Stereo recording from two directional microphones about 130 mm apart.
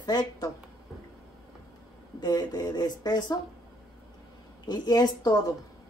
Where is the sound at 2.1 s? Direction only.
30° left (ahead or behind).